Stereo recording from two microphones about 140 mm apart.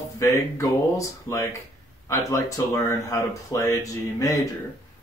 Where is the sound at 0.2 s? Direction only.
20° left (ahead or behind).